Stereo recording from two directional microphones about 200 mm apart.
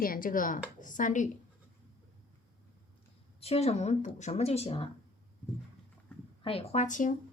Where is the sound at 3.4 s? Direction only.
30° left (ahead or behind).